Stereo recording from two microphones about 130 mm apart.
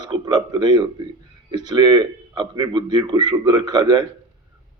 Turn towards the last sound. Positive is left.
turn(degrees=-30)  # may be behind; listen again after turning